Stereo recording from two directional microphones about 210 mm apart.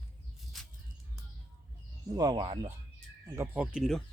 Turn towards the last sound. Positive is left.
turn(degrees=0)  # may be behind; listen again after turning